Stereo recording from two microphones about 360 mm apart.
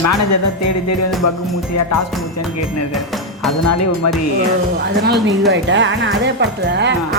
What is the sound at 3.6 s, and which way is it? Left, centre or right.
Speech, left.